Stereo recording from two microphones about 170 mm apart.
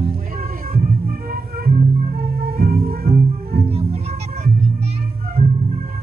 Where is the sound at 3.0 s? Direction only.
35° right (ahead or behind).